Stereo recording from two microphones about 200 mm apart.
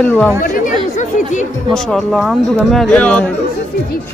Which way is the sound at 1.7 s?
Centre (ahead or behind).